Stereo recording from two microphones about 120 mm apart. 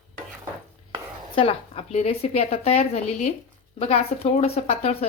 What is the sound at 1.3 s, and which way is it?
A woman's voice, 55° left (ahead or behind).